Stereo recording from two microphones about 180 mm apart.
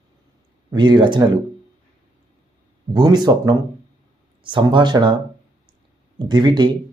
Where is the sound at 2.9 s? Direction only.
25° right (ahead or behind).